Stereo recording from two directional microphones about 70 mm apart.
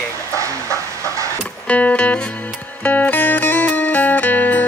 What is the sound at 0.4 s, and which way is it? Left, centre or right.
Train, right.